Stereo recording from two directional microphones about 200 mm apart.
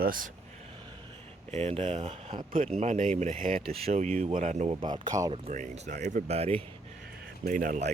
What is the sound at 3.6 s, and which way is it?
Speech, 30° right (ahead or behind).